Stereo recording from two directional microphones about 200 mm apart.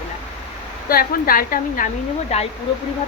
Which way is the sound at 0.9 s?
45° left (ahead or behind).